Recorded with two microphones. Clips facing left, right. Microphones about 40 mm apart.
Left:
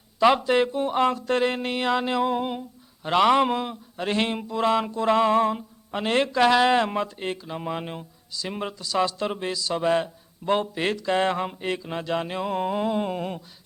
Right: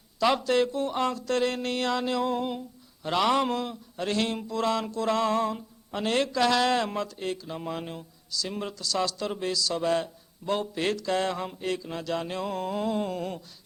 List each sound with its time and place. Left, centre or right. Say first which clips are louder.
0.2 s speech: left 4 dB; left